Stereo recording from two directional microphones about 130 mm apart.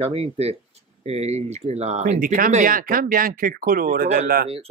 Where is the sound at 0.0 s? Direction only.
50° right (ahead or behind); by 4.5 s 85° right.